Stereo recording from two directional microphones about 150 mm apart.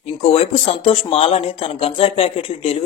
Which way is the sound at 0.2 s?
40° left (ahead or behind).